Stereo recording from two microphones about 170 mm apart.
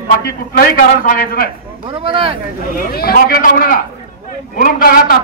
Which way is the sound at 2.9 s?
60° left (ahead or behind).